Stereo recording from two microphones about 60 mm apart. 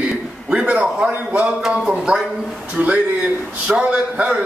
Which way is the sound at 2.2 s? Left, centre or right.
Centre.